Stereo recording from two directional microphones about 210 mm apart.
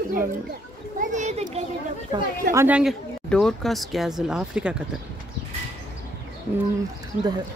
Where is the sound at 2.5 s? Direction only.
10° right (ahead or behind).